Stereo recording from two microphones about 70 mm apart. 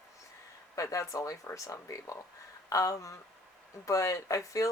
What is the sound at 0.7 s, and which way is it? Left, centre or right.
Speech, left.